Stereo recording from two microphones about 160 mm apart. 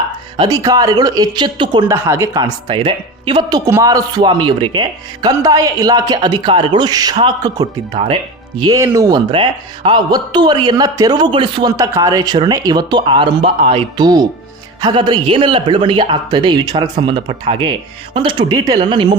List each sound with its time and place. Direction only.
0.3 s speech: 25° right (ahead or behind)
1.8 s speech: 15° right (ahead or behind)
3.7 s speech: 20° right (ahead or behind)
7.9 s speech: 40° right (ahead or behind)
8.6 s speech: 20° right (ahead or behind)
9.3 s speech: 35° right (ahead or behind)